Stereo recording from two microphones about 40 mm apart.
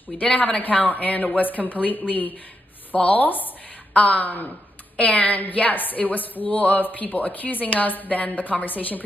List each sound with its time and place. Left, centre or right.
0.1 s speech: left
4.9 s speech: left